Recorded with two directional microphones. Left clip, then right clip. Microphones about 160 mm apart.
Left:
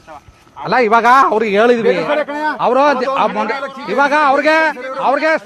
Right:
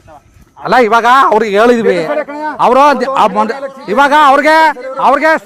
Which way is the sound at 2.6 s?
90° right.